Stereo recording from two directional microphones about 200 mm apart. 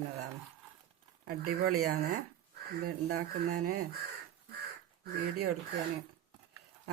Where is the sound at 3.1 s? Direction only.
90° right.